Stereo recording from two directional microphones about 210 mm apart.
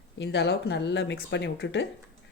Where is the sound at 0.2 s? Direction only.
50° left (ahead or behind).